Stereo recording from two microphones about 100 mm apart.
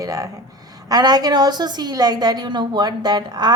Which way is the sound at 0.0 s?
35° right (ahead or behind).